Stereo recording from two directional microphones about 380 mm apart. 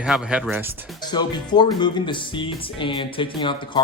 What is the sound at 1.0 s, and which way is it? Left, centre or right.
Speech, centre.